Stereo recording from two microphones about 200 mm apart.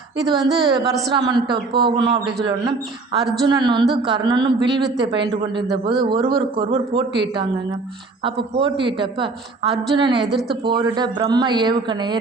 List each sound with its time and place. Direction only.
0.6 s a man's voice: 20° right (ahead or behind)
10.2 s speech: centre (ahead or behind)
10.6 s a man's voice: 25° right (ahead or behind)